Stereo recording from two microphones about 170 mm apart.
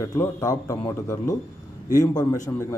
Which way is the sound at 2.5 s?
15° left (ahead or behind).